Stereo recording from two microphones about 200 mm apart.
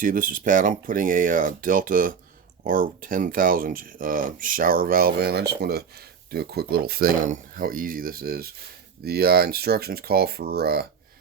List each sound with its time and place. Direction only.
0.0 s speech: 40° right (ahead or behind)